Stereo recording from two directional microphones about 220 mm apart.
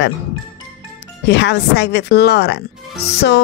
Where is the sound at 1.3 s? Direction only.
55° left (ahead or behind).